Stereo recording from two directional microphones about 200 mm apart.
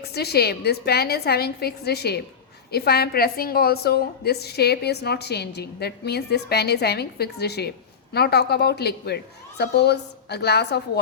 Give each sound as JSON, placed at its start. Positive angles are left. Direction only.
{"t": 0.1, "sound": "a woman's voice", "side_deg": 55}